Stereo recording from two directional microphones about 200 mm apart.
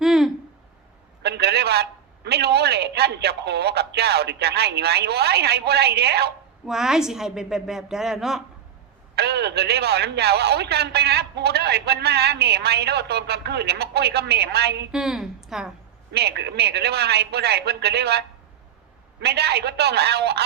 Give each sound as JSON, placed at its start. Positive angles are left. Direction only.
{"t": 0.0, "sound": "a sound", "side_deg": 0}
{"t": 1.2, "sound": "speech", "side_deg": -55}
{"t": 6.7, "sound": "a woman's voice", "side_deg": 0}
{"t": 9.1, "sound": "speech", "side_deg": -55}
{"t": 14.9, "sound": "a woman's voice", "side_deg": -5}
{"t": 16.1, "sound": "speech", "side_deg": -55}
{"t": 19.2, "sound": "speech", "side_deg": -55}